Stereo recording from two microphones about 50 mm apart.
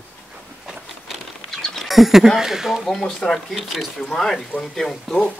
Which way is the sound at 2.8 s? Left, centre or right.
Centre.